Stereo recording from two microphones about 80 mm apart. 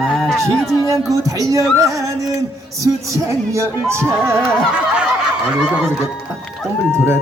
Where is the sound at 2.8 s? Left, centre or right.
Right.